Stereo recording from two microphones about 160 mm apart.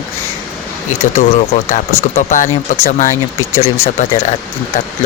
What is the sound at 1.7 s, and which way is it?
Speech, 50° left (ahead or behind).